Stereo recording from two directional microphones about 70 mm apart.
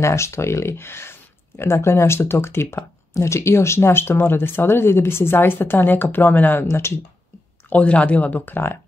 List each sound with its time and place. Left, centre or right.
0.0 s speech: left
6.7 s speech: left
7.7 s speech: centre